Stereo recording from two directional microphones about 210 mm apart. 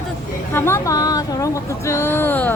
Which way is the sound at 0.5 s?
10° left (ahead or behind).